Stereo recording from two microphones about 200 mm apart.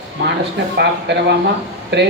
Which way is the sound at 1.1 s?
60° right (ahead or behind).